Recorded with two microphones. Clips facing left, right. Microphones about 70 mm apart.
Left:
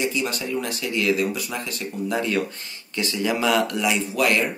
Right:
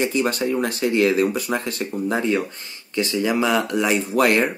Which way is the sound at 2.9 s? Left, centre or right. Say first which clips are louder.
Right 4 dB; right.